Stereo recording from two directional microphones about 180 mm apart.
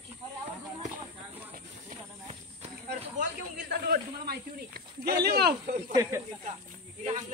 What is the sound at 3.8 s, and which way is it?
Speech, 60° right (ahead or behind).